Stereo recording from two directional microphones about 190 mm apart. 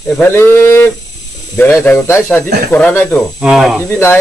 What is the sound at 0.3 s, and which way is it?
Speech, 15° left (ahead or behind).